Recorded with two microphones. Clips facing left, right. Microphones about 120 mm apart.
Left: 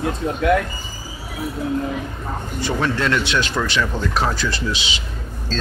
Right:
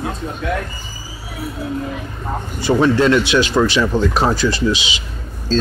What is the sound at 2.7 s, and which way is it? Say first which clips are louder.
Speech: right 8 dB; 20° right (ahead or behind).